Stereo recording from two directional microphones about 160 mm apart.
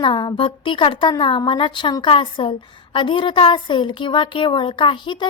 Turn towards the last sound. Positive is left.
turn(degrees=30)  # may be behind; listen again after turning